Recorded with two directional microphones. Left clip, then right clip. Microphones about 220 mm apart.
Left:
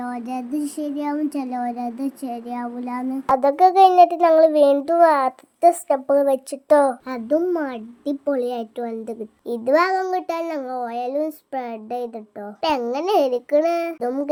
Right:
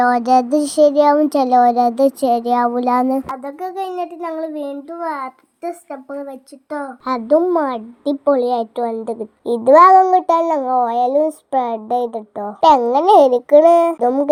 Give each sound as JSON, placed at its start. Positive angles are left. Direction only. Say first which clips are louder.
{"t": 0.0, "sound": "child singing", "louder": "right 16 dB", "side_deg": -35}
{"t": 3.2, "sound": "a child's voice", "louder": "left 11 dB", "side_deg": 30}
{"t": 7.0, "sound": "a child's voice", "louder": "right 7 dB", "side_deg": -5}
{"t": 9.5, "sound": "a child's voice", "louder": "right 10 dB", "side_deg": -15}